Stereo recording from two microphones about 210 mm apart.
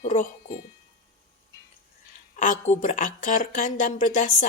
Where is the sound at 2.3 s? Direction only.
35° left (ahead or behind).